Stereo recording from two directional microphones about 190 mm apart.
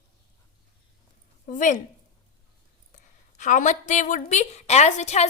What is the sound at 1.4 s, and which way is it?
Speech, 40° left (ahead or behind).